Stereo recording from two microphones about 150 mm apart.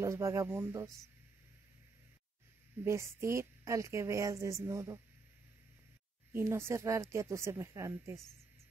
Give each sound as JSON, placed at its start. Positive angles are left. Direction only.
{"t": 0.0, "sound": "a woman's voice", "side_deg": -20}
{"t": 2.8, "sound": "a woman's voice", "side_deg": -20}
{"t": 6.3, "sound": "a woman's voice", "side_deg": -15}